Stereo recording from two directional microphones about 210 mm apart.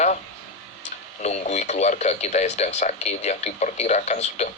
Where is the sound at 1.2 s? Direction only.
30° left (ahead or behind).